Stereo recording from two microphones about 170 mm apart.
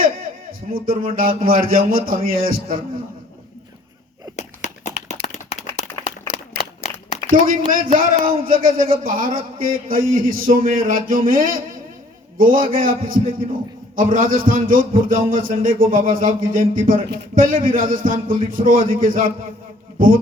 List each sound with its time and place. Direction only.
0.7 s a man's voice: 55° right (ahead or behind)
4.9 s a sound: 40° left (ahead or behind)
7.3 s a man's voice: 55° right (ahead or behind)